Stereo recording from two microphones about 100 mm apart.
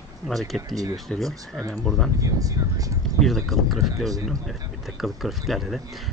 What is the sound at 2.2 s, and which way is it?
Speech, 35° right (ahead or behind).